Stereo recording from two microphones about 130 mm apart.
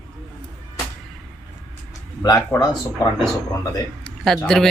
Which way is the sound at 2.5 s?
20° left (ahead or behind).